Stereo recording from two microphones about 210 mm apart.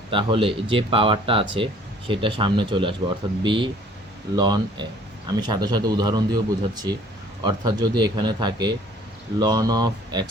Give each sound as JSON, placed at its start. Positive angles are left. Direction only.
{"t": 0.1, "sound": "speech", "side_deg": -25}
{"t": 7.4, "sound": "speech", "side_deg": -20}